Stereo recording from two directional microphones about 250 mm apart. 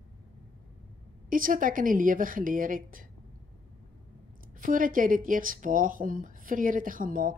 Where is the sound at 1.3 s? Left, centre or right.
Right.